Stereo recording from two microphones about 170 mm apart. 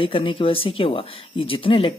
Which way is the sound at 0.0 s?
30° left (ahead or behind).